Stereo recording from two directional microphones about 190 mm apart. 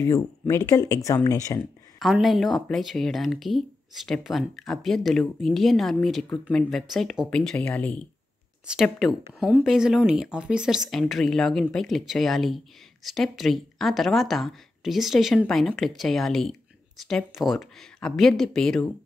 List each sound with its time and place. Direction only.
0.0 s speech: 15° left (ahead or behind)
2.0 s speech: centre (ahead or behind)